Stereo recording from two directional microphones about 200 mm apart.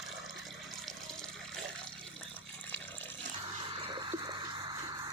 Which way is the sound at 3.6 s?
25° right (ahead or behind).